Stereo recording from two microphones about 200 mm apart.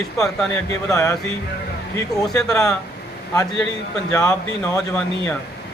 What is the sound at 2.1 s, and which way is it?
Speech, centre (ahead or behind).